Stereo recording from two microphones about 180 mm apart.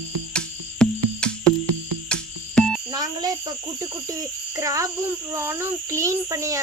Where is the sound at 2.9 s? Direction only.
20° right (ahead or behind).